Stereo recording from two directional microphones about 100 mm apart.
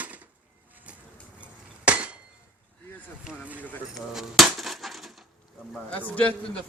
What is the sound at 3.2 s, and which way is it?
Chop, 10° right (ahead or behind).